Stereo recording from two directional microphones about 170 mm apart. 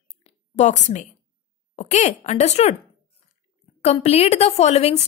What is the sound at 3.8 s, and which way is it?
Speech, 40° left (ahead or behind).